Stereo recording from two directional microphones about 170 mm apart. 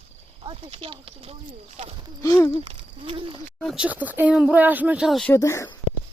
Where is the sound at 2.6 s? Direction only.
30° right (ahead or behind).